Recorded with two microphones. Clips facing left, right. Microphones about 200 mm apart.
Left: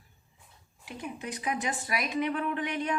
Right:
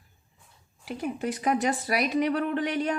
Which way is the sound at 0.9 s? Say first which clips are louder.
Right 8 dB; 40° right (ahead or behind).